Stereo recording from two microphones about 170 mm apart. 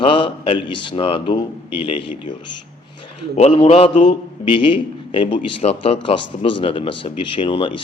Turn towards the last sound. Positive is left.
turn(degrees=30)  # may be behind; listen again after turning